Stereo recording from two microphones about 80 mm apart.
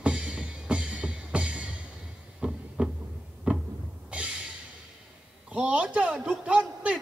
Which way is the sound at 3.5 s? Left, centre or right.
Centre.